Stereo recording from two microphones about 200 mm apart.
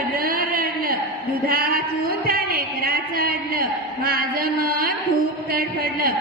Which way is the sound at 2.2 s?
50° right (ahead or behind).